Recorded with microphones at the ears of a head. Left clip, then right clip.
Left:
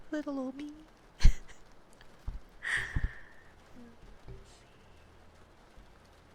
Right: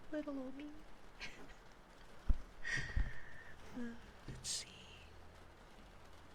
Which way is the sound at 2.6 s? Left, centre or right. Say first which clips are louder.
Left 9 dB; left.